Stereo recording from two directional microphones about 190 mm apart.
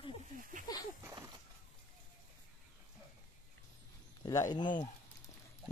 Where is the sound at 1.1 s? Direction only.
20° right (ahead or behind).